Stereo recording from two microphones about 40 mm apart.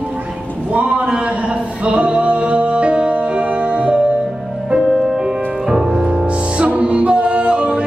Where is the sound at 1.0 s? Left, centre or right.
Right.